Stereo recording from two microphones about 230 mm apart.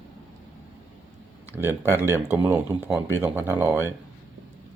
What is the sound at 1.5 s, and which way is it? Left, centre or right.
Speech, centre.